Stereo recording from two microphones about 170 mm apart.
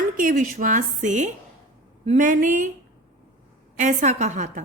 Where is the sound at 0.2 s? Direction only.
50° right (ahead or behind).